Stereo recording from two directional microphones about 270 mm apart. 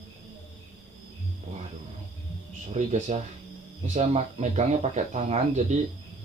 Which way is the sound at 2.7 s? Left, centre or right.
Right.